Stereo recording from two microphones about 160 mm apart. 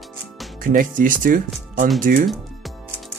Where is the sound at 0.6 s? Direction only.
60° right (ahead or behind).